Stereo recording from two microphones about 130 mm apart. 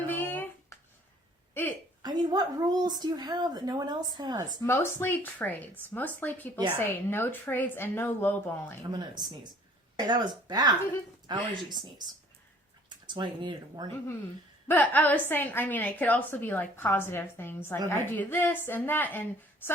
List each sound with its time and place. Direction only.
0.1 s a sound: 15° left (ahead or behind)
2.0 s a woman's voice: 30° right (ahead or behind)
4.6 s a woman's voice: 20° left (ahead or behind)
8.9 s a woman's voice: 35° right (ahead or behind)
13.1 s a woman's voice: 35° right (ahead or behind)
14.7 s a woman's voice: 15° left (ahead or behind)